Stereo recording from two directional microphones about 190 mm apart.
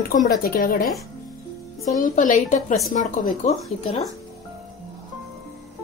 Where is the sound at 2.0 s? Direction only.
45° left (ahead or behind).